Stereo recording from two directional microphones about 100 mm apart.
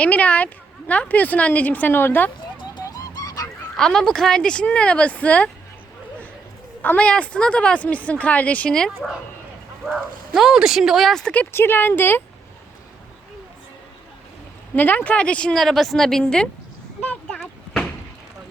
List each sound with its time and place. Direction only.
0.0 s speech: 15° left (ahead or behind)
2.8 s music: 35° left (ahead or behind)
3.8 s speech: 5° left (ahead or behind)
6.8 s speech: 15° left (ahead or behind)
11.5 s a woman's voice: 20° left (ahead or behind)
14.8 s speech: 15° left (ahead or behind)
17.0 s a sound: 15° left (ahead or behind)
17.4 s a sound: centre (ahead or behind)